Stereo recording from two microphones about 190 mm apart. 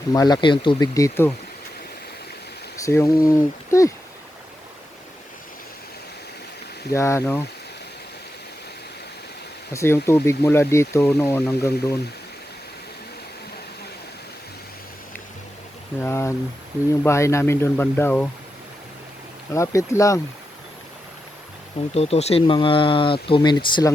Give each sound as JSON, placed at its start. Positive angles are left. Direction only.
{"t": 0.1, "sound": "speech", "side_deg": 20}
{"t": 2.7, "sound": "speech", "side_deg": 15}
{"t": 6.9, "sound": "speech", "side_deg": 15}
{"t": 9.7, "sound": "speech", "side_deg": 15}
{"t": 16.0, "sound": "speech", "side_deg": 15}
{"t": 19.5, "sound": "speech", "side_deg": 15}
{"t": 21.9, "sound": "speech", "side_deg": 35}